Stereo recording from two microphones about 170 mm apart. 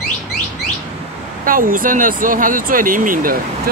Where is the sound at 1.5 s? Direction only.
55° right (ahead or behind).